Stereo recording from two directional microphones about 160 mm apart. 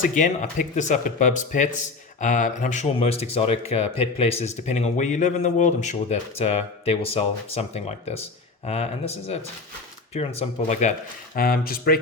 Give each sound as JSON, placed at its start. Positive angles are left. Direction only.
{"t": 0.0, "sound": "speech", "side_deg": 55}
{"t": 11.3, "sound": "speech", "side_deg": 65}